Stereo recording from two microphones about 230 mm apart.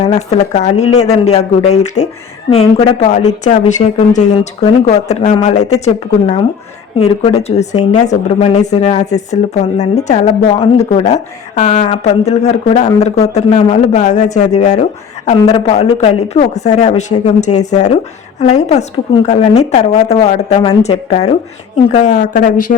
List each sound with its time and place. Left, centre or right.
0.0 s speech: left